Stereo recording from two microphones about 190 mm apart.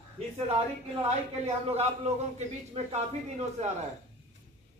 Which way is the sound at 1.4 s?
35° right (ahead or behind).